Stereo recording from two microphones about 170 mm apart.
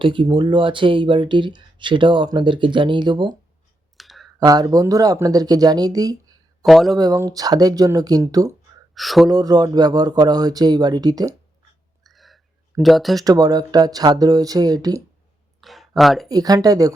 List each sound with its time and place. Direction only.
0.0 s speech: 30° right (ahead or behind)
3.9 s clicking: centre (ahead or behind)
4.4 s speech: 20° right (ahead or behind)
6.7 s speech: centre (ahead or behind)
6.9 s speech: 20° right (ahead or behind)
9.0 s speech: centre (ahead or behind)
9.3 s speech: 20° right (ahead or behind)
12.0 s a sound: centre (ahead or behind)
13.2 s speech: 20° right (ahead or behind)
15.6 s a sound: centre (ahead or behind)
16.0 s speech: centre (ahead or behind)
16.3 s speech: 20° right (ahead or behind)